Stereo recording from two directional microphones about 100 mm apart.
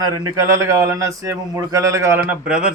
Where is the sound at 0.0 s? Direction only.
35° right (ahead or behind).